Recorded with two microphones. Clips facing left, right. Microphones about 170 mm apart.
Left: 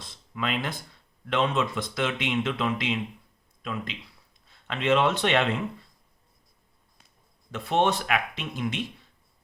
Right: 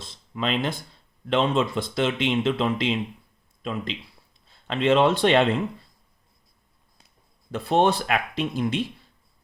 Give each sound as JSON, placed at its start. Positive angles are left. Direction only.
{"t": 0.0, "sound": "a sound", "side_deg": -25}
{"t": 1.3, "sound": "speech", "side_deg": -30}
{"t": 7.5, "sound": "speech", "side_deg": -35}